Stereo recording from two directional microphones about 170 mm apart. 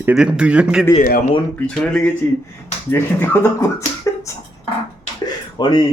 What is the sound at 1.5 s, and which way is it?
Speech, 5° left (ahead or behind).